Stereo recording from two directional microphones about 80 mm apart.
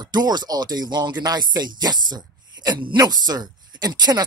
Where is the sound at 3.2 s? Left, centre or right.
Right.